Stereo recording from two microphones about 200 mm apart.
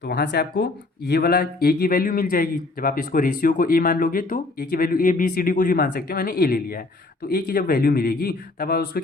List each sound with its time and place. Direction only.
0.0 s speech: 50° left (ahead or behind)